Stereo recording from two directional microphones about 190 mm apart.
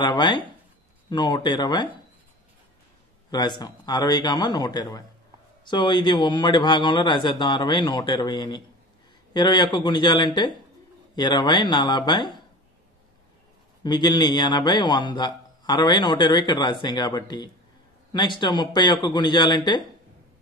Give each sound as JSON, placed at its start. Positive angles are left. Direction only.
{"t": 0.0, "sound": "a man's voice", "side_deg": 25}
{"t": 3.3, "sound": "a man's voice", "side_deg": 20}
{"t": 13.8, "sound": "a man's voice", "side_deg": 20}